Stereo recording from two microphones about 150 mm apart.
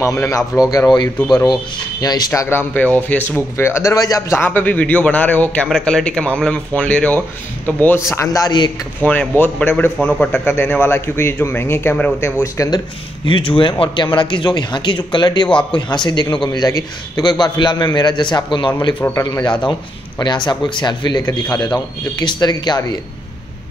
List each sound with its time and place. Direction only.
0.0 s a man's voice: 20° left (ahead or behind)
2.7 s a man's voice: 10° left (ahead or behind)
8.1 s a man's voice: 20° left (ahead or behind)
9.0 s a man's voice: 10° left (ahead or behind)
13.3 s a man's voice: 35° left (ahead or behind)
18.9 s a man's voice: 15° left (ahead or behind)
19.6 s a man's voice: 30° left (ahead or behind)